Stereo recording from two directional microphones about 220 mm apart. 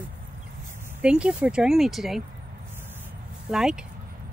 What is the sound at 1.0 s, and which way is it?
Speech, 5° right (ahead or behind).